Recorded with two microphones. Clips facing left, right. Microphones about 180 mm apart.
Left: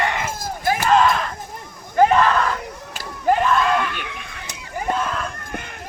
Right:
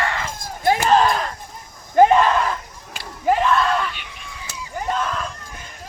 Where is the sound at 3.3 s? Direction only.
Centre (ahead or behind).